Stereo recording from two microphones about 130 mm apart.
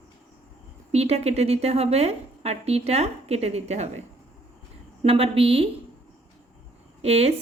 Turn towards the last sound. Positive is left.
turn(degrees=-50)  # may be behind; listen again after turning